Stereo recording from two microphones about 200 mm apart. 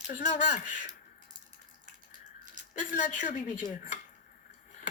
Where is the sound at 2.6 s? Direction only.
40° right (ahead or behind).